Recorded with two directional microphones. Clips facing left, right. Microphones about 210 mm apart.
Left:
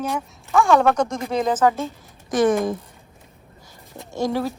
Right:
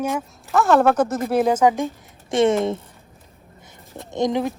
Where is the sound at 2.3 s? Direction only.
25° right (ahead or behind).